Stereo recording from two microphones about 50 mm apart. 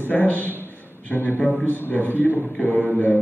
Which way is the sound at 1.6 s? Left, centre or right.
Left.